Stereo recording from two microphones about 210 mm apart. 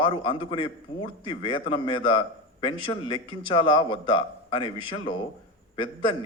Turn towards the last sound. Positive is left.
turn(degrees=25)  # may be behind; listen again after turning